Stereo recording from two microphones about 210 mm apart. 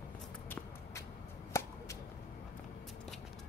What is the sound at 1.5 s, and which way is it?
Whip, 15° left (ahead or behind).